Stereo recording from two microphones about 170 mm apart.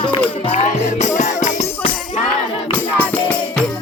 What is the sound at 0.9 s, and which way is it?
Music, 45° left (ahead or behind).